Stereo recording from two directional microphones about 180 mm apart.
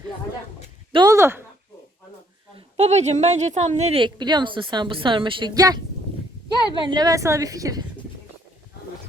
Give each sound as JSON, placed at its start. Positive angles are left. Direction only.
{"t": 0.9, "sound": "speech", "side_deg": -20}
{"t": 2.6, "sound": "a woman's voice", "side_deg": -35}